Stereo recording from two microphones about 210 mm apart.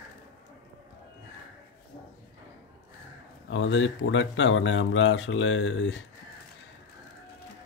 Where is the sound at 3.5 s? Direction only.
65° left (ahead or behind).